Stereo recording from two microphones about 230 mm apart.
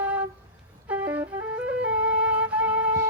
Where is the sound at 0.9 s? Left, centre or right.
Centre.